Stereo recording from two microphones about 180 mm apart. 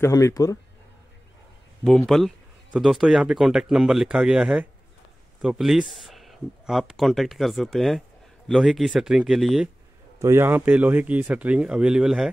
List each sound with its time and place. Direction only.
0.0 s speech: 15° left (ahead or behind)
1.9 s speech: centre (ahead or behind)
10.1 s speech: 15° right (ahead or behind)